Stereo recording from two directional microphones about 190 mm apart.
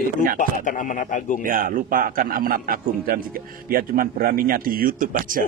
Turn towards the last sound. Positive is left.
turn(degrees=-45)  # may be behind; listen again after turning